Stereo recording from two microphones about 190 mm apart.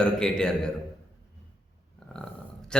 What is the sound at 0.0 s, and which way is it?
Speech, 5° left (ahead or behind).